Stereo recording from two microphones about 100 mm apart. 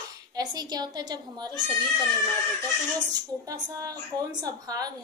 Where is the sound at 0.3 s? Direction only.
40° right (ahead or behind).